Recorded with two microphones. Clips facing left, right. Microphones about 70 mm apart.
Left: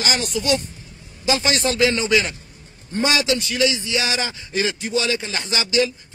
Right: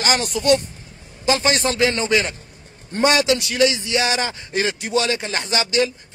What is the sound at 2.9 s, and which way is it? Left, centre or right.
A man's voice, right.